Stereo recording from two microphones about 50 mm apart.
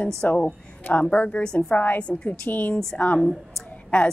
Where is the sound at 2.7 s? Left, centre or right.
Centre.